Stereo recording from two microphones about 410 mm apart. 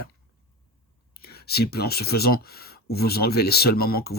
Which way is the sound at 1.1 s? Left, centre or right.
Left.